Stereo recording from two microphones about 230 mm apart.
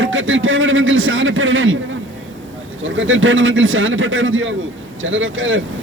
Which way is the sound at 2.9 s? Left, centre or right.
Right.